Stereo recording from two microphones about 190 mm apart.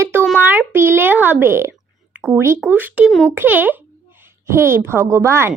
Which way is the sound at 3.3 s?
10° right (ahead or behind).